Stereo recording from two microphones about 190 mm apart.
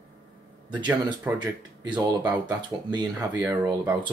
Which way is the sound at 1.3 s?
20° right (ahead or behind).